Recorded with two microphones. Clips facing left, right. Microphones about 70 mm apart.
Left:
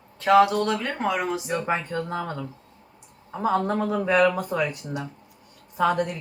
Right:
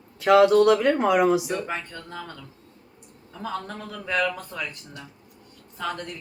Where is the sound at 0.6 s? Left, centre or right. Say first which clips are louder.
Right 7 dB; centre.